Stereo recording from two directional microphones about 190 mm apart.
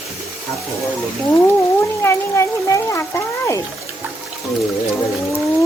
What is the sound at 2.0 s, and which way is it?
Speech, 15° left (ahead or behind).